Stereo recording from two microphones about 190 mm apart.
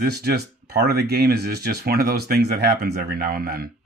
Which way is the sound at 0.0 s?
55° right (ahead or behind).